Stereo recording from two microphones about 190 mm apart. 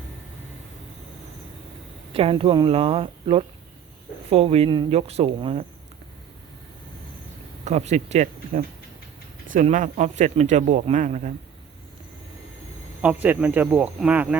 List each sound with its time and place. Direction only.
2.1 s speech: 30° right (ahead or behind)
7.6 s speech: 35° right (ahead or behind)
13.0 s speech: 10° right (ahead or behind)